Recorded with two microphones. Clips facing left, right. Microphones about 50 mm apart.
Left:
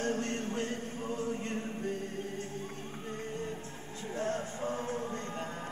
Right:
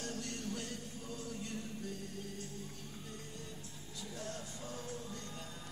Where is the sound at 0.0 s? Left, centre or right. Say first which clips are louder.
Left 9 dB; left.